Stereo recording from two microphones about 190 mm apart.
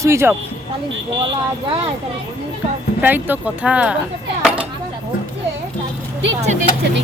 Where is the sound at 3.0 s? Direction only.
10° right (ahead or behind).